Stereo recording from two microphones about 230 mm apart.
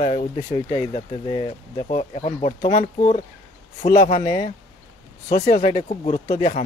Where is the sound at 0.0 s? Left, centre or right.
Left.